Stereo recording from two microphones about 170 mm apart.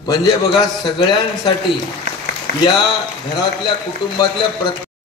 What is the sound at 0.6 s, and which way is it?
Speech, 25° left (ahead or behind).